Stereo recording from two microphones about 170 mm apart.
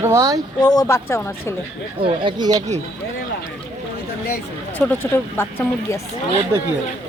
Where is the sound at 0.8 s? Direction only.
15° left (ahead or behind).